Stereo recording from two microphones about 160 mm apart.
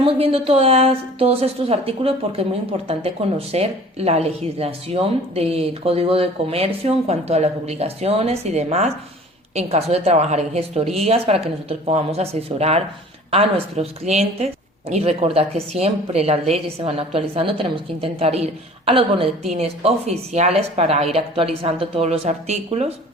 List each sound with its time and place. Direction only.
0.0 s a woman's voice: 35° right (ahead or behind)